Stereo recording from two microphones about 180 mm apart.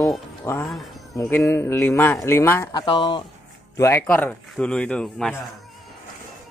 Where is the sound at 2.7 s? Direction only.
25° left (ahead or behind).